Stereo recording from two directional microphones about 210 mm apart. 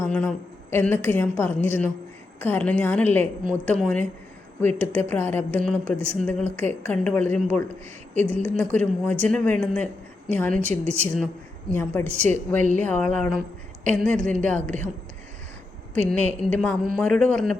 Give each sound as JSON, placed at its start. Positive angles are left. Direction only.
{"t": 0.0, "sound": "a woman's voice", "side_deg": 5}
{"t": 12.5, "sound": "speech", "side_deg": -35}
{"t": 12.8, "sound": "a woman's voice", "side_deg": 5}
{"t": 16.0, "sound": "a woman's voice", "side_deg": 5}